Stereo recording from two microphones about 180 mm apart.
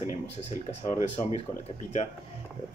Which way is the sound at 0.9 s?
40° left (ahead or behind).